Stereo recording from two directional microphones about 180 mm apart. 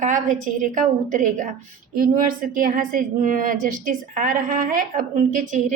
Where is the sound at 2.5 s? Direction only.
50° right (ahead or behind).